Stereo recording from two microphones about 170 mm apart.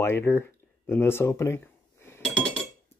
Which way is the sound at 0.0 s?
15° left (ahead or behind).